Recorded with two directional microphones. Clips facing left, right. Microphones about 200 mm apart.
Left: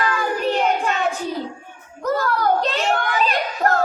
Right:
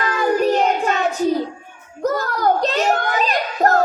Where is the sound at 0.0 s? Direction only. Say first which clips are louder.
Right 4 dB; 40° right (ahead or behind).